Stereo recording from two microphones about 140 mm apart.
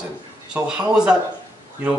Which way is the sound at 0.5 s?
5° right (ahead or behind).